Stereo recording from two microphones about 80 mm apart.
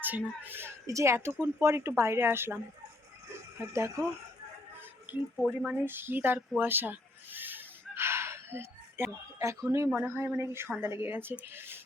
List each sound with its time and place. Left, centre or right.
0.0 s speech: right
0.9 s a woman's voice: right
3.6 s a woman's voice: right
5.1 s speech: right
6.6 s gasp: right
9.4 s a woman's voice: right
10.0 s speech: right
10.3 s a woman's voice: right